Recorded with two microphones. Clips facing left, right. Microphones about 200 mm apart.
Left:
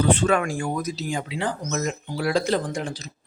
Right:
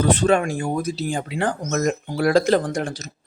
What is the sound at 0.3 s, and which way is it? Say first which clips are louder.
Speech: right 3 dB; 25° right (ahead or behind).